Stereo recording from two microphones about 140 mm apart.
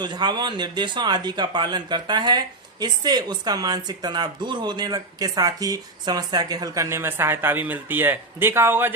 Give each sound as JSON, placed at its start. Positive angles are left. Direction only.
{"t": 0.0, "sound": "speech", "side_deg": -30}